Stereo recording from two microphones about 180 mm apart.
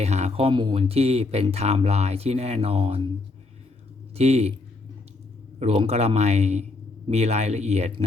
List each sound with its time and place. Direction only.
0.0 s speech: 40° right (ahead or behind)
4.1 s speech: 35° right (ahead or behind)
5.5 s speech: 35° right (ahead or behind)